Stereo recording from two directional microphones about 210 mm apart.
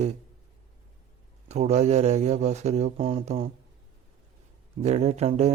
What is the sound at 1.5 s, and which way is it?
Speech, 30° right (ahead or behind).